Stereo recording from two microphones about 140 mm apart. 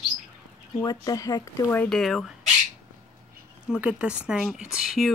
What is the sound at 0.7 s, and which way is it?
Speech, 25° left (ahead or behind).